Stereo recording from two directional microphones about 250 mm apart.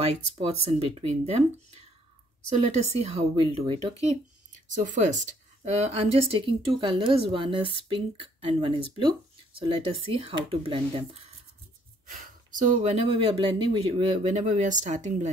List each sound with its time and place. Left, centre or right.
0.0 s speech: right
2.5 s speech: right
12.1 s speech: right